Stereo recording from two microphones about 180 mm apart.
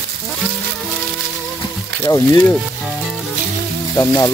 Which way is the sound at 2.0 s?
15° left (ahead or behind).